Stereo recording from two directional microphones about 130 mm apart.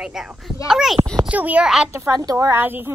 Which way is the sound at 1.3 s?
10° right (ahead or behind).